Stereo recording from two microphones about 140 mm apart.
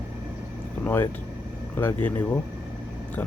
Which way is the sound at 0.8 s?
15° left (ahead or behind).